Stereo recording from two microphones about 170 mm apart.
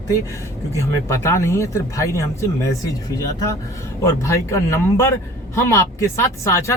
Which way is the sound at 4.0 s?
15° left (ahead or behind).